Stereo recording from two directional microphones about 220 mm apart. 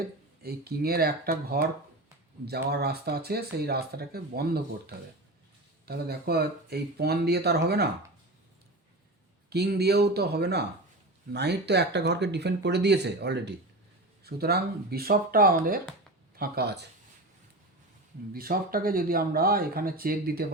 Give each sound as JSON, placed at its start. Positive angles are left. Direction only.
{"t": 0.4, "sound": "speech", "side_deg": -45}
{"t": 9.5, "sound": "speech", "side_deg": -45}
{"t": 18.3, "sound": "speech", "side_deg": -40}